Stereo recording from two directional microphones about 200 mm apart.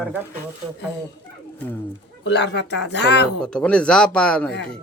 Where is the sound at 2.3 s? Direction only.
60° left (ahead or behind).